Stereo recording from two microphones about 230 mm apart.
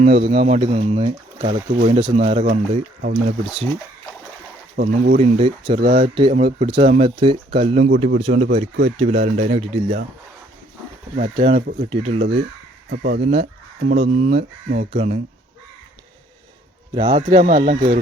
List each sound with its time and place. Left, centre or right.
0.0 s speech: right
2.5 s speech: right
3.2 s speech: right
4.8 s speech: right
11.3 s speech: right
12.9 s speech: right
14.1 s speech: right
16.9 s speech: right